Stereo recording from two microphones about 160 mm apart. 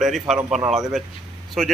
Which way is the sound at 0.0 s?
Centre (ahead or behind).